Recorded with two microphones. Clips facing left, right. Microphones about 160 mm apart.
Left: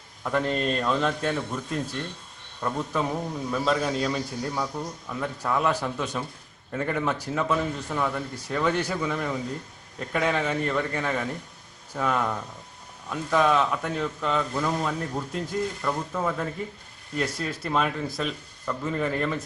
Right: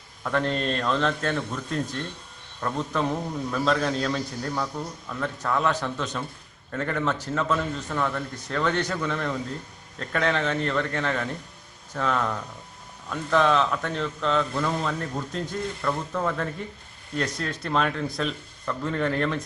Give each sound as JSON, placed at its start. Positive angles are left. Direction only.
{"t": 0.3, "sound": "a man's voice", "side_deg": 10}